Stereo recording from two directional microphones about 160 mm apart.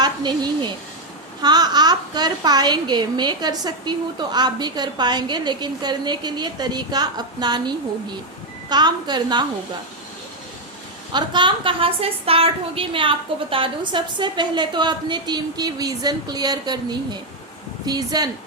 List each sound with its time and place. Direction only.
0.0 s a sound: 25° right (ahead or behind)
1.4 s a woman's voice: 25° right (ahead or behind)
8.7 s a woman's voice: 25° right (ahead or behind)
11.1 s a woman's voice: 30° right (ahead or behind)